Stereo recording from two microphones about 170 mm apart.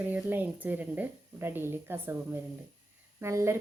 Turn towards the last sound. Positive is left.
turn(degrees=-15)  # may be behind; listen again after turning